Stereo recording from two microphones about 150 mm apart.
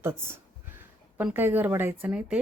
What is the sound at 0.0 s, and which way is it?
Speech, 15° right (ahead or behind).